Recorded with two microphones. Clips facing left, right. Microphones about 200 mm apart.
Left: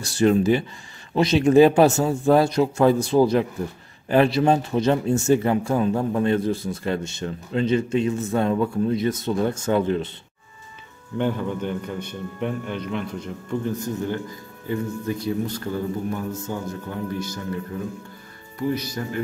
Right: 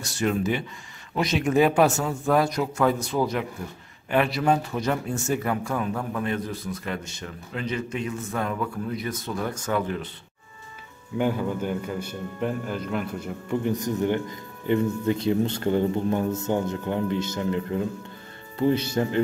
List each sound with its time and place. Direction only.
0.2 s speech: 35° left (ahead or behind)
11.1 s a man's voice: 5° right (ahead or behind)
13.7 s a man's voice: 15° right (ahead or behind)